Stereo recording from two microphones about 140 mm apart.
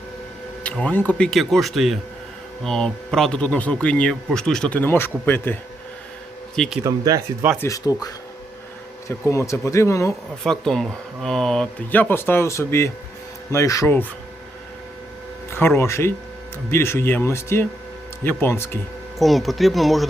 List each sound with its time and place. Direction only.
0.6 s speech: 10° left (ahead or behind)
6.8 s speech: 25° right (ahead or behind)
7.6 s speech: 25° left (ahead or behind)
9.0 s speech: 20° left (ahead or behind)
10.4 s speech: 5° left (ahead or behind)
15.5 s speech: 15° left (ahead or behind)
19.2 s speech: centre (ahead or behind)